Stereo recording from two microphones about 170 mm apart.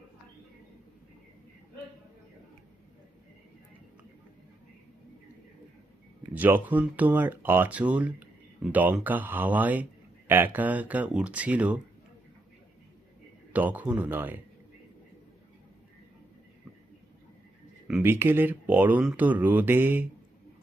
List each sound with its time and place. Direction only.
6.3 s speech: 10° right (ahead or behind)
13.5 s speech: 10° right (ahead or behind)
17.8 s speech: 10° right (ahead or behind)